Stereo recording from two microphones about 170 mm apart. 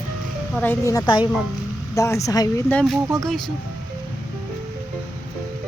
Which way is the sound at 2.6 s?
5° left (ahead or behind).